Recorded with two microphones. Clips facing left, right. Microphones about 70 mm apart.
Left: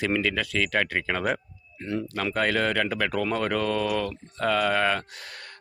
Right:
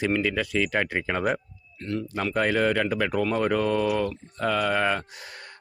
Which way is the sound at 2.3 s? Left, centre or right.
Centre.